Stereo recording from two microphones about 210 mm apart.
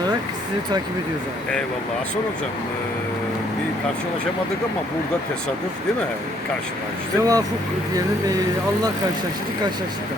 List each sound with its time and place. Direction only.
7.2 s speech: 15° right (ahead or behind)